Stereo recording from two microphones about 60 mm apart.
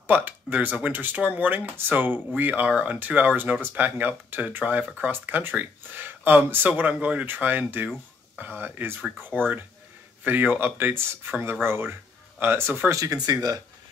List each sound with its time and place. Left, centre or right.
0.0 s speech: right
9.3 s speech: centre
10.2 s speech: right
12.9 s speech: right